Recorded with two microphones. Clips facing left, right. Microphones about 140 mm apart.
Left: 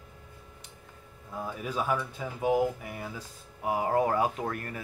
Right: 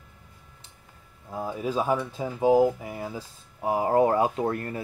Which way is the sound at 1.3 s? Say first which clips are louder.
Right 5 dB; 30° right (ahead or behind).